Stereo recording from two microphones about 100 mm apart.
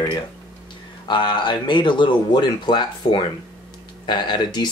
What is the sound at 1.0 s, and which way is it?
Speech, 50° left (ahead or behind).